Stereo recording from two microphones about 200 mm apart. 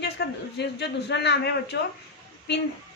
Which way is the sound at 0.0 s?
55° left (ahead or behind).